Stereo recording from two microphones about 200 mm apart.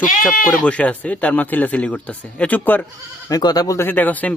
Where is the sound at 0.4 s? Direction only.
5° left (ahead or behind).